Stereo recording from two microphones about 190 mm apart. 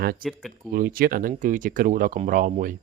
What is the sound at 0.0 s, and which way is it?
Speech, 50° right (ahead or behind).